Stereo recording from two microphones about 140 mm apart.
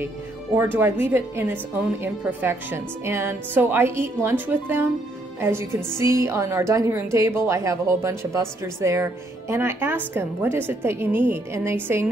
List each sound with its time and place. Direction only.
0.6 s a woman's voice: 15° right (ahead or behind)